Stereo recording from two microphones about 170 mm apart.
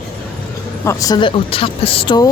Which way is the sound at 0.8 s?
20° left (ahead or behind).